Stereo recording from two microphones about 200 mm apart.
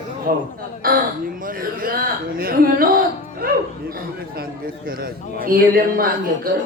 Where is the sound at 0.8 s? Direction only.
45° right (ahead or behind).